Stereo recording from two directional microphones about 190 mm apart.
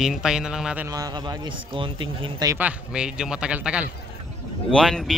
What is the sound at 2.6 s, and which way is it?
Speech, 5° right (ahead or behind).